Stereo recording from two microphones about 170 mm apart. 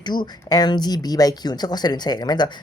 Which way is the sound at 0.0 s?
25° left (ahead or behind).